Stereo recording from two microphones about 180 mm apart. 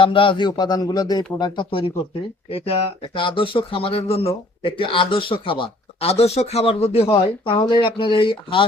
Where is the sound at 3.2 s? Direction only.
30° left (ahead or behind).